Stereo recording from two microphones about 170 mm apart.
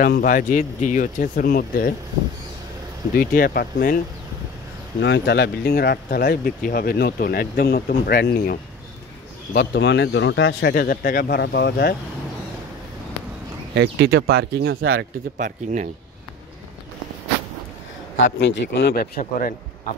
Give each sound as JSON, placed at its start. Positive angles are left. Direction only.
{"t": 0.0, "sound": "speech", "side_deg": 55}
{"t": 3.2, "sound": "speech", "side_deg": 60}
{"t": 5.0, "sound": "speech", "side_deg": 85}
{"t": 9.5, "sound": "a man's voice", "side_deg": 85}
{"t": 13.7, "sound": "speech", "side_deg": -70}
{"t": 15.4, "sound": "speech", "side_deg": -45}
{"t": 18.2, "sound": "speech", "side_deg": 90}